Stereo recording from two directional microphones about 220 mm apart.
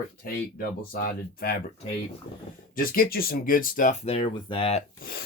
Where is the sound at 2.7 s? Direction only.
40° left (ahead or behind).